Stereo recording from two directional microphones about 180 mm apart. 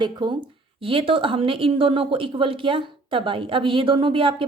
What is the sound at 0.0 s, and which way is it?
A woman's voice, 25° right (ahead or behind).